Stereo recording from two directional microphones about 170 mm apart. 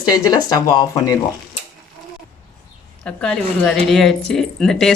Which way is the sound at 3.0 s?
5° left (ahead or behind).